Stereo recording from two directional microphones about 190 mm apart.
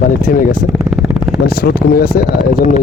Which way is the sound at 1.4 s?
50° left (ahead or behind).